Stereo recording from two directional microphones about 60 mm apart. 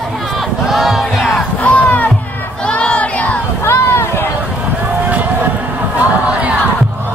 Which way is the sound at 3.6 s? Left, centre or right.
Left.